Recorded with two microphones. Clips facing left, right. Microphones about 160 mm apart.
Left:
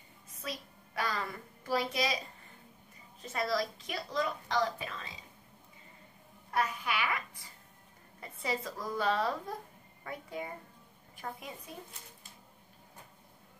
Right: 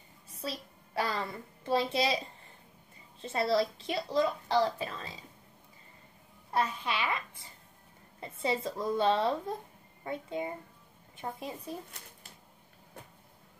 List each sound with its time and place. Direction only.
0.4 s a woman's voice: 30° right (ahead or behind)
6.5 s a woman's voice: 25° right (ahead or behind)